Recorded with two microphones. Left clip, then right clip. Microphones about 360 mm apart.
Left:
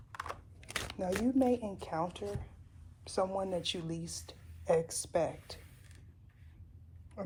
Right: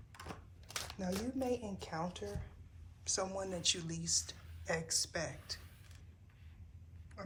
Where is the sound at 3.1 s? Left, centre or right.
Centre.